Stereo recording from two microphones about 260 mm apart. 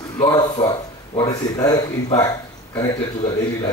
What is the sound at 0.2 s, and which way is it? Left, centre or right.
Speech, centre.